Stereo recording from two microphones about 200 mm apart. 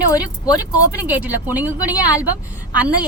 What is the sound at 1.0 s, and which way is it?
A woman's voice, 10° right (ahead or behind).